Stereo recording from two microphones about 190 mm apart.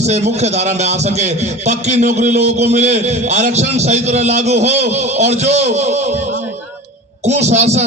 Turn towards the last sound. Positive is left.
turn(degrees=-35)  # may be behind; listen again after turning